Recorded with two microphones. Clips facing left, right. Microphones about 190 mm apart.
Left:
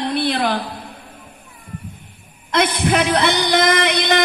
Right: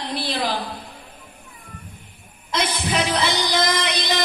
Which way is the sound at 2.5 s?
60° left (ahead or behind).